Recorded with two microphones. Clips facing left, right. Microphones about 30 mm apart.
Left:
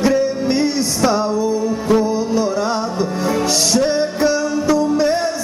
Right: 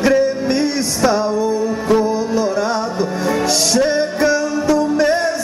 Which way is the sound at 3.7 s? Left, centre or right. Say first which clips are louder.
Right 1 dB; centre.